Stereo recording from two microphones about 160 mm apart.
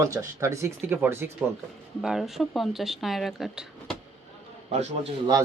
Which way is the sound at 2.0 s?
Centre (ahead or behind).